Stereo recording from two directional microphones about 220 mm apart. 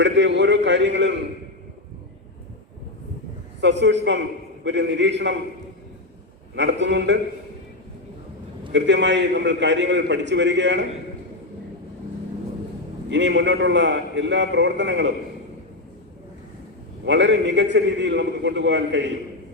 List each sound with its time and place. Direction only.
0.0 s a man's voice: 55° right (ahead or behind)
3.6 s a man's voice: 55° right (ahead or behind)
6.6 s a man's voice: 55° right (ahead or behind)
8.7 s a man's voice: 55° right (ahead or behind)
13.1 s a man's voice: 55° right (ahead or behind)
17.1 s a man's voice: 55° right (ahead or behind)